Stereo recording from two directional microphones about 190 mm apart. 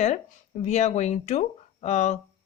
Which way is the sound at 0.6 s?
35° left (ahead or behind).